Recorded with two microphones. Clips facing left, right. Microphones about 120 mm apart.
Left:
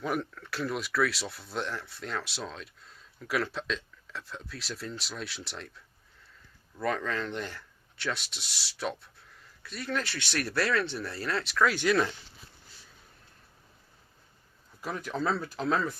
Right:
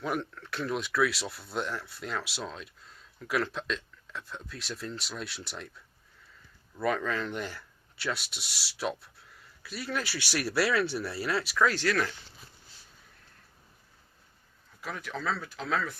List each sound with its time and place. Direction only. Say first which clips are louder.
0.0 s speech: left 1 dB; centre (ahead or behind)
11.7 s speech: left 3 dB; 15° left (ahead or behind)
14.8 s speech: left 4 dB; 35° left (ahead or behind)